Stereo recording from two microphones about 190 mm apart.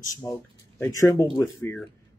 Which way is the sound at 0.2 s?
15° left (ahead or behind).